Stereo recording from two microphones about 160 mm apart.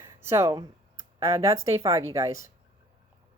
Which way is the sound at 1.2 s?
20° right (ahead or behind).